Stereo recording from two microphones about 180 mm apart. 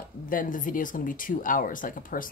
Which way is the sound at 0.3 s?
50° left (ahead or behind).